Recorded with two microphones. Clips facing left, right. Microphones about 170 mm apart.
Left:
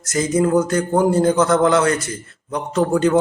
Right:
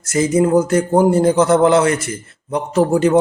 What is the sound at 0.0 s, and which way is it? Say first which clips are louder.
A man's voice: right 3 dB; 25° right (ahead or behind).